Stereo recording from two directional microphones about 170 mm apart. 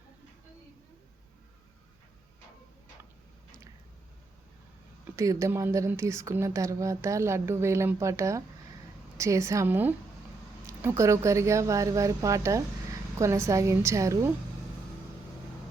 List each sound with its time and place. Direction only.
5.1 s speech: 20° right (ahead or behind)